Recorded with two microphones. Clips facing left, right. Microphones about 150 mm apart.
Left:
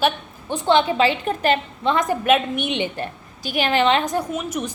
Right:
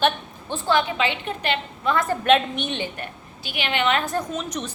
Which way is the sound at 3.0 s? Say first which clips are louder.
Left 6 dB; 40° left (ahead or behind).